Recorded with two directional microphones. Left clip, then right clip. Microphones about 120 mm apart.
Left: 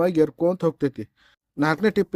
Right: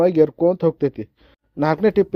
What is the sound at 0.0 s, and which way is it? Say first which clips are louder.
A man's voice: right 5 dB; 20° right (ahead or behind).